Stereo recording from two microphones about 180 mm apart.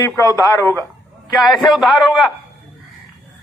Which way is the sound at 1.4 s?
Centre (ahead or behind).